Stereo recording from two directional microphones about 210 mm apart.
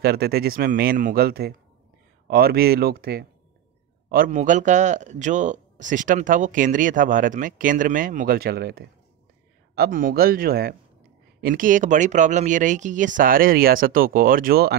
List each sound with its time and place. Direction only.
0.0 s a man's voice: 50° right (ahead or behind)